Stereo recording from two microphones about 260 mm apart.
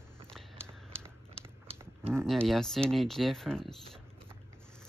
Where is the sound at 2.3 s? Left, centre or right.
Centre.